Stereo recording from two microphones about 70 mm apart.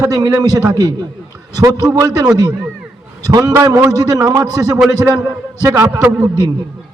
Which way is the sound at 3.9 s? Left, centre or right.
Right.